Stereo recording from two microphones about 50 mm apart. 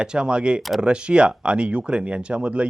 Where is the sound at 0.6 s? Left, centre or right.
Centre.